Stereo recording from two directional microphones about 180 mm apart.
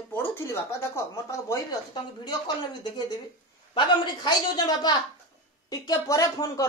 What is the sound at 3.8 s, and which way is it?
A woman's voice, 25° left (ahead or behind).